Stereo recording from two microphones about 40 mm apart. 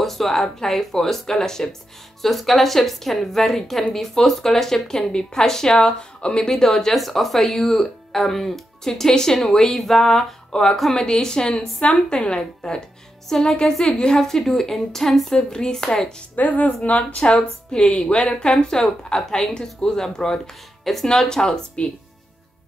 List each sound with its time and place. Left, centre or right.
0.0 s speech: centre
2.2 s a woman's voice: centre; by 6.5 s left
6.5 s speech: centre
10.5 s a woman's voice: centre
16.3 s a woman's voice: left
17.2 s a woman's voice: left; by 19.5 s centre
19.5 s speech: centre
21.8 s a woman's voice: left